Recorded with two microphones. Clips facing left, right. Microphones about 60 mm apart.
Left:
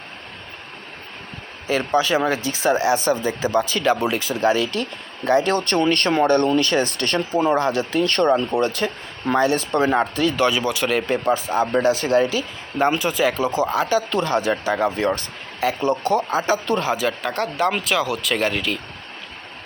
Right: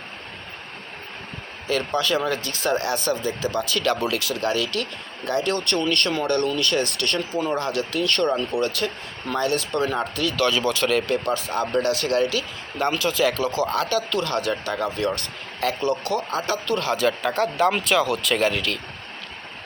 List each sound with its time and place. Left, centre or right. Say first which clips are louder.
1.6 s speech: left 4 dB; centre
5.6 s speech: left 4 dB; left
6.2 s speech: left 5 dB; left
7.4 s speech: left 7 dB; left
7.9 s speech: left 3 dB; left
8.8 s speech: left 3 dB; left
13.7 s speech: left 3 dB; centre; by 16.2 s left
16.3 s speech: left 4 dB; centre